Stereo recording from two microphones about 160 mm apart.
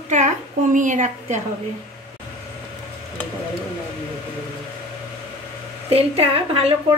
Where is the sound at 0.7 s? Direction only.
50° right (ahead or behind).